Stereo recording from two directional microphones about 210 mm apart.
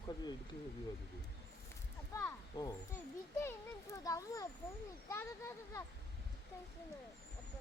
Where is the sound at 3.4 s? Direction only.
15° left (ahead or behind).